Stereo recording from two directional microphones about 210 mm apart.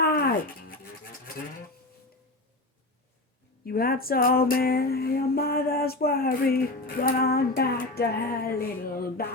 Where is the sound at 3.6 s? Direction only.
45° left (ahead or behind).